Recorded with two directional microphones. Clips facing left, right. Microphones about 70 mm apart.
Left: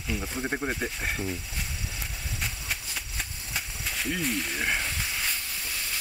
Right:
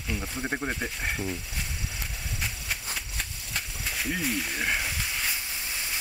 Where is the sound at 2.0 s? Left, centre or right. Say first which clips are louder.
Even; centre.